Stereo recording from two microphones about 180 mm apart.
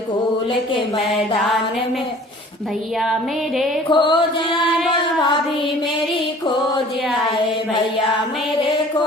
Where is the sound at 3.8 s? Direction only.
25° left (ahead or behind).